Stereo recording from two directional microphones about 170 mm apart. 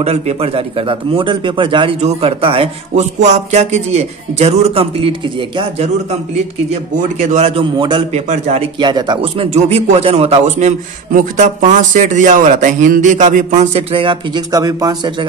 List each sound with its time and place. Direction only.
0.0 s a man's voice: 35° right (ahead or behind)
6.7 s a man's voice: 45° right (ahead or behind)
8.1 s a man's voice: 40° right (ahead or behind)
8.7 s a man's voice: 25° right (ahead or behind)